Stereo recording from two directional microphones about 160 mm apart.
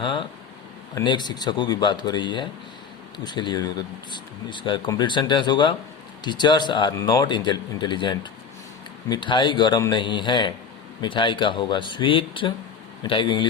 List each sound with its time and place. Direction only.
0.0 s a man's voice: 30° left (ahead or behind)